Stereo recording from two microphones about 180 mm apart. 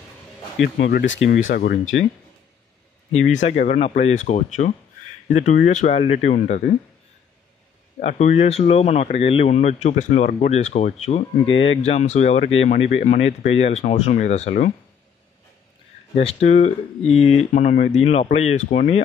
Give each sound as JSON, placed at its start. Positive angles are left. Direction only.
{"t": 0.6, "sound": "speech", "side_deg": 65}
{"t": 1.5, "sound": "speech", "side_deg": 55}
{"t": 3.3, "sound": "speech", "side_deg": 40}
{"t": 8.0, "sound": "speech", "side_deg": 40}
{"t": 16.2, "sound": "speech", "side_deg": 35}